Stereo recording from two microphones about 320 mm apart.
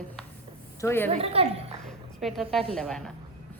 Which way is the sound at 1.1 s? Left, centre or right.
Centre.